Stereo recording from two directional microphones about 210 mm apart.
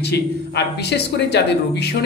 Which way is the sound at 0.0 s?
50° left (ahead or behind).